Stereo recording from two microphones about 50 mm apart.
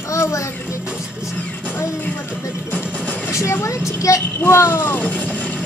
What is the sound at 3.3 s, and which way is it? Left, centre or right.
Speech, left.